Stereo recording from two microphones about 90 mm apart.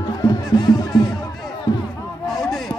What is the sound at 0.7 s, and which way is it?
Music, 5° right (ahead or behind).